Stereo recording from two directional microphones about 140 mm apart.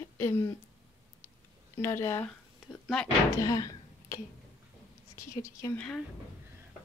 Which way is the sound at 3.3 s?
25° left (ahead or behind).